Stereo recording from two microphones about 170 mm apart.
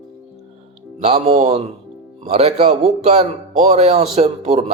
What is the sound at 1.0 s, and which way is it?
A man's voice, 40° right (ahead or behind).